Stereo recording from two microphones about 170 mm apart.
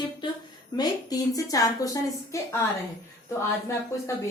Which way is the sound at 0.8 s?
20° left (ahead or behind).